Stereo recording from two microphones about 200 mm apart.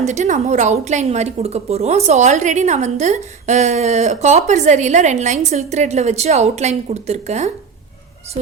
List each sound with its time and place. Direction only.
0.0 s a woman's voice: 35° right (ahead or behind)